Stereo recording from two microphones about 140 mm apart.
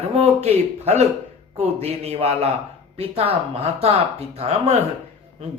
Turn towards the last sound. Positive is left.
turn(degrees=-45)  # may be behind; listen again after turning